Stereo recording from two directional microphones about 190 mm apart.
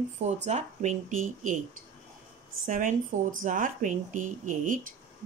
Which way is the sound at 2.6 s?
45° right (ahead or behind).